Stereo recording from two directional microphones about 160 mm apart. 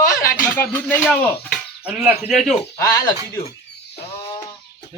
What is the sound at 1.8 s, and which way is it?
Speech, 5° right (ahead or behind).